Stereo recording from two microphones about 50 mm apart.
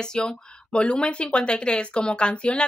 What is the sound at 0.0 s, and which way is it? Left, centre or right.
Speech, centre.